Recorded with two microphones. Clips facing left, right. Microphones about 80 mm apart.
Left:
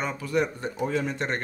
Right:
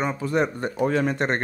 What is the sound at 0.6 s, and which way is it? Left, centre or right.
Speech, right.